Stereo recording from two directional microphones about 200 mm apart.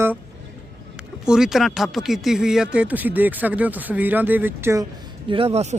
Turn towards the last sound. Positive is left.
turn(degrees=-35)  # may be behind; listen again after turning